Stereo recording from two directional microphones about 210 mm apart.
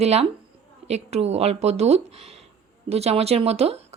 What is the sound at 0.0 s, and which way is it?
A woman's voice, 30° right (ahead or behind).